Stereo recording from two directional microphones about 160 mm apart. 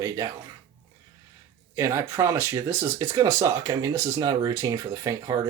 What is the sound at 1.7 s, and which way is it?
Speech, 15° right (ahead or behind).